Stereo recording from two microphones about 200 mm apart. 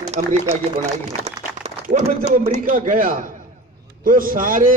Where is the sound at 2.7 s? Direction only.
40° right (ahead or behind).